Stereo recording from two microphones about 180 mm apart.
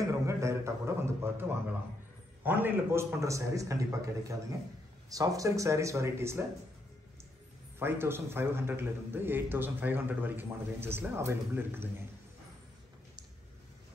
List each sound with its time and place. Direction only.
0.0 s a sound: 15° right (ahead or behind)
2.4 s a man's voice: 10° right (ahead or behind)
7.8 s a man's voice: 10° right (ahead or behind)